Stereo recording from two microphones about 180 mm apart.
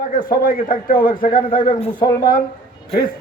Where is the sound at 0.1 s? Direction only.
50° left (ahead or behind).